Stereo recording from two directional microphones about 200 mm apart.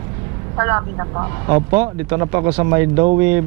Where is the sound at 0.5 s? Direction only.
15° right (ahead or behind).